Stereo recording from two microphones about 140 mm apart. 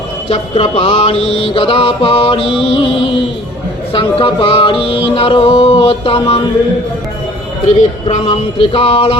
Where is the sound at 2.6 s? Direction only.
40° left (ahead or behind).